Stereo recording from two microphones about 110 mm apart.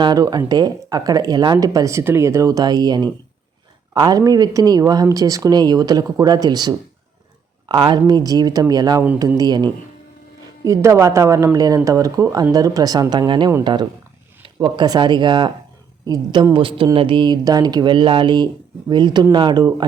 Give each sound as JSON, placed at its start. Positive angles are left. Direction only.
{"t": 0.0, "sound": "speech", "side_deg": -40}
{"t": 10.6, "sound": "speech", "side_deg": -25}